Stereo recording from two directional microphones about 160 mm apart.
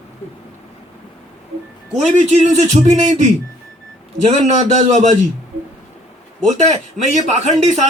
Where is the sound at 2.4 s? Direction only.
40° right (ahead or behind).